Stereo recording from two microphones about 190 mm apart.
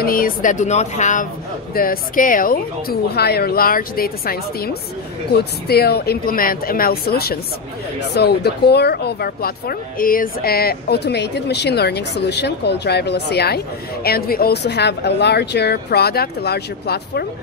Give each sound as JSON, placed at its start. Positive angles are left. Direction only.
{"t": 0.0, "sound": "speech", "side_deg": 50}
{"t": 1.7, "sound": "speech", "side_deg": 50}